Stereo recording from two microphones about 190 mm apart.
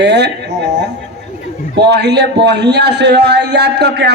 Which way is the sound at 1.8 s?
60° right (ahead or behind).